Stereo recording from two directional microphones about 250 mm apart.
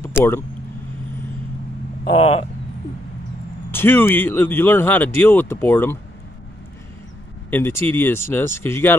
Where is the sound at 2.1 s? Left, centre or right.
Left.